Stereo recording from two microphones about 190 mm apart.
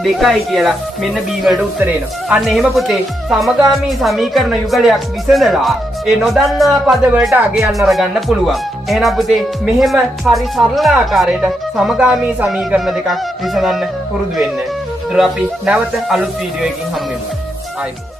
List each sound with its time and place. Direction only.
0.0 s speech: centre (ahead or behind)
15.1 s speech: 5° right (ahead or behind)